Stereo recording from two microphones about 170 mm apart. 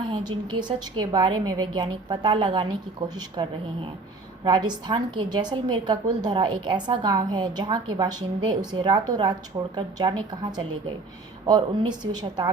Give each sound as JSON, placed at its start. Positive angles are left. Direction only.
{"t": 0.1, "sound": "a woman's voice", "side_deg": -25}